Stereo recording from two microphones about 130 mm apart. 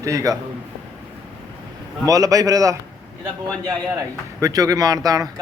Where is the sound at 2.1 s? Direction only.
25° right (ahead or behind).